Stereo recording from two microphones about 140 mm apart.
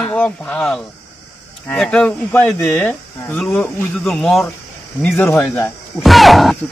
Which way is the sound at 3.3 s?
5° left (ahead or behind).